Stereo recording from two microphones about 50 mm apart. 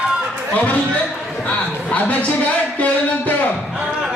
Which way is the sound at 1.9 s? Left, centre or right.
Left.